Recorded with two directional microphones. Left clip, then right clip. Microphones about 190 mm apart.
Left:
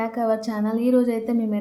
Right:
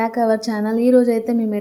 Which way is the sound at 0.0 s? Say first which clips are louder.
Right 5 dB; 20° right (ahead or behind).